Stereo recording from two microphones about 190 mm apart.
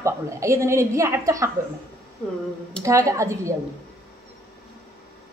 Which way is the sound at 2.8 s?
15° right (ahead or behind).